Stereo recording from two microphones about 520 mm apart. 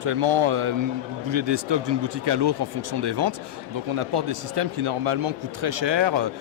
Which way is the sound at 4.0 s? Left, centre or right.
Right.